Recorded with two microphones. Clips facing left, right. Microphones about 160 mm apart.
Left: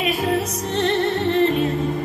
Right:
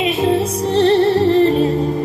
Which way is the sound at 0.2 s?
30° right (ahead or behind).